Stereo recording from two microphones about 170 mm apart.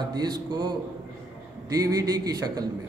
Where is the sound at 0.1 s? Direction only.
25° right (ahead or behind).